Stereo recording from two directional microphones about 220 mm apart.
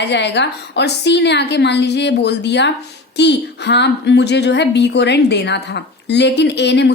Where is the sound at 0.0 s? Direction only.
50° left (ahead or behind).